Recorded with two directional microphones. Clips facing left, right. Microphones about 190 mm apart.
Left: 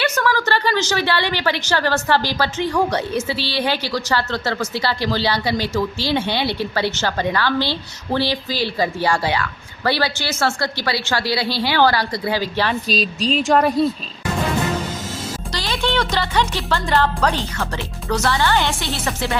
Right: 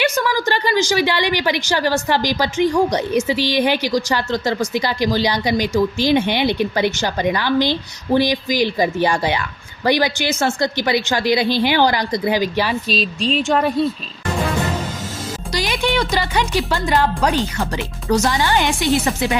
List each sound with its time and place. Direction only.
0.0 s a woman's voice: 15° right (ahead or behind)
12.9 s speech: centre (ahead or behind)
15.5 s a woman's voice: 15° right (ahead or behind)